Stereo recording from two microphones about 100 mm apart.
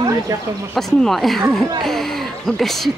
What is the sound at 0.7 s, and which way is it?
Speech, 5° left (ahead or behind).